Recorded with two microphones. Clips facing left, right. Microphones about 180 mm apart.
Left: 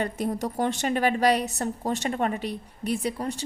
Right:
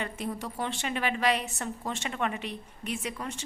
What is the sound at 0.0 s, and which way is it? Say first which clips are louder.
A woman's voice: left 7 dB; 40° left (ahead or behind).